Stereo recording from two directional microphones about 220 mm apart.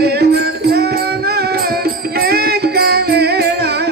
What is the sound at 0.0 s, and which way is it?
Music, 45° right (ahead or behind).